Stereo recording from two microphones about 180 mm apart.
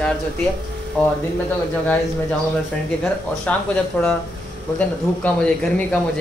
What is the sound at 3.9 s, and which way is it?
Speech, 10° left (ahead or behind).